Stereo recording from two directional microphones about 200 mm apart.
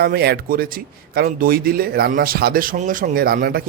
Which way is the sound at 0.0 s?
50° right (ahead or behind).